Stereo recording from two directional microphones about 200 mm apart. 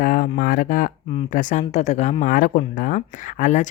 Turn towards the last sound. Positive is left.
turn(degrees=40)  # may be behind; listen again after turning